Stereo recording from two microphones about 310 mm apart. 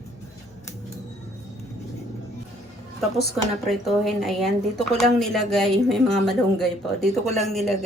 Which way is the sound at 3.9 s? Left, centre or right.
Centre.